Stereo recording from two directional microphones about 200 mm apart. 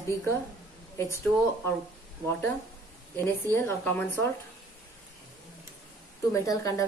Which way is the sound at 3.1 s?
10° left (ahead or behind).